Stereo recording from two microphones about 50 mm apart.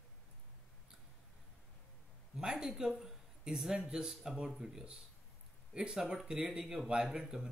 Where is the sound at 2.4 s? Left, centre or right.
Centre.